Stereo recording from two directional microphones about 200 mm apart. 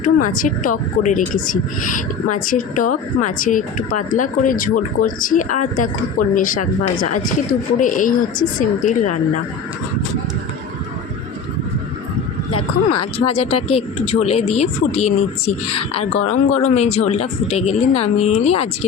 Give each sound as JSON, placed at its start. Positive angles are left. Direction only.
{"t": 0.0, "sound": "speech", "side_deg": 40}
{"t": 13.1, "sound": "speech", "side_deg": 30}